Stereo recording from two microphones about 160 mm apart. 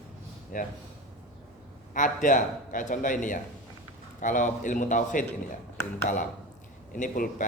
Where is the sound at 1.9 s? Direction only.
55° left (ahead or behind).